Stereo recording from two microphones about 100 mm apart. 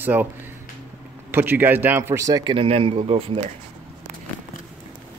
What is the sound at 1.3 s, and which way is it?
A man's voice, 20° right (ahead or behind).